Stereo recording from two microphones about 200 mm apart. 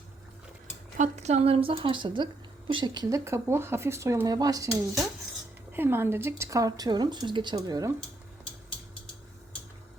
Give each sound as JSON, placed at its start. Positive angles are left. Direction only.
{"t": 0.9, "sound": "speech", "side_deg": -35}
{"t": 5.7, "sound": "a woman's voice", "side_deg": -10}